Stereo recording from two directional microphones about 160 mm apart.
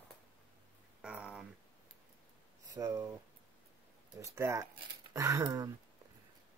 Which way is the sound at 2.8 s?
20° right (ahead or behind).